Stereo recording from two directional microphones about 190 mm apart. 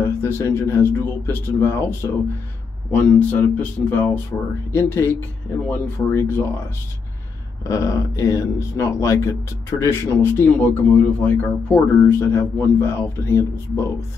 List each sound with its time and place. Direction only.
0.0 s a sound: 15° left (ahead or behind)
0.6 s speech: 15° left (ahead or behind)
7.6 s speech: 15° left (ahead or behind)